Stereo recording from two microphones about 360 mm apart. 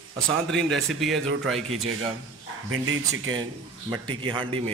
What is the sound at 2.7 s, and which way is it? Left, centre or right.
Speech, right.